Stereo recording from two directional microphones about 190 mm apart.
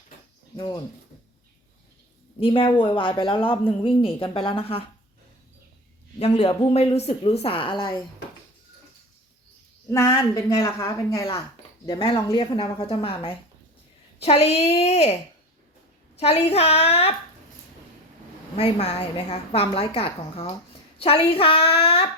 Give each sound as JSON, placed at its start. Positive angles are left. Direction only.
{"t": 0.5, "sound": "speech", "side_deg": 15}
{"t": 2.4, "sound": "speech", "side_deg": 30}
{"t": 6.1, "sound": "a woman's voice", "side_deg": 30}
{"t": 9.9, "sound": "a woman's voice", "side_deg": 15}
{"t": 18.5, "sound": "a woman's voice", "side_deg": 35}